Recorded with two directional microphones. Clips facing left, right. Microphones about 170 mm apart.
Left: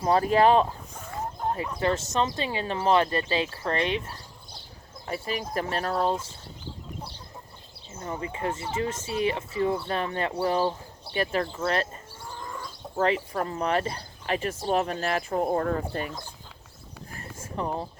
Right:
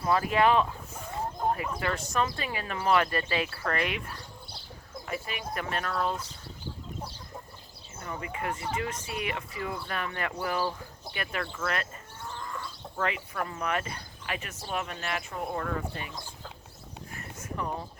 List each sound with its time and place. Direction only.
0.0 s speech: 35° left (ahead or behind)
8.0 s speech: 25° left (ahead or behind)
13.0 s speech: 35° left (ahead or behind)
17.1 s a sound: 35° left (ahead or behind)